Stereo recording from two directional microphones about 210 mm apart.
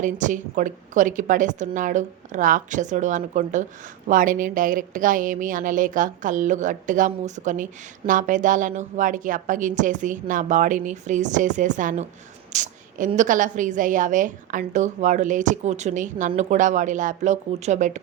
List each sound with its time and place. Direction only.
0.0 s a woman's voice: 35° right (ahead or behind)